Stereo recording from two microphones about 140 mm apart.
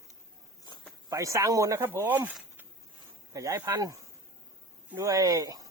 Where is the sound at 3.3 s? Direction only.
20° right (ahead or behind).